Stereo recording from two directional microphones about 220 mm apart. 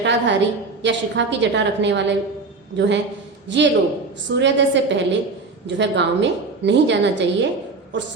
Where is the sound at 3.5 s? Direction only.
55° right (ahead or behind).